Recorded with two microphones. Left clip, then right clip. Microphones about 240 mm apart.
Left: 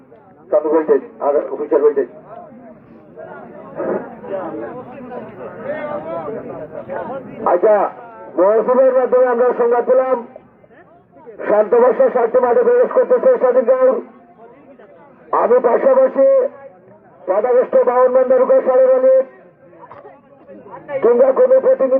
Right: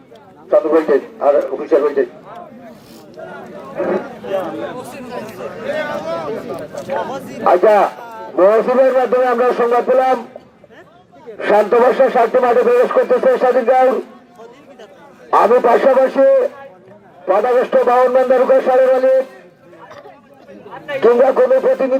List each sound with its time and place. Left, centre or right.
0.5 s a man's voice: right
3.8 s a sound: right
4.9 s a man's voice: right
11.3 s a man's voice: right
15.3 s a man's voice: right
20.8 s a man's voice: right